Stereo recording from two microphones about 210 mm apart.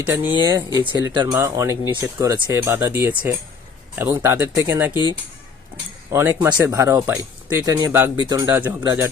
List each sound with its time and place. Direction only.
0.0 s speech: 10° right (ahead or behind)
0.3 s speech: 20° right (ahead or behind)
6.1 s speech: 15° right (ahead or behind)